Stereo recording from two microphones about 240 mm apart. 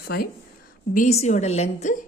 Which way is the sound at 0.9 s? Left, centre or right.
Left.